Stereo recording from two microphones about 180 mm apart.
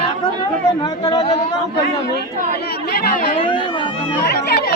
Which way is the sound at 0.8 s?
25° left (ahead or behind).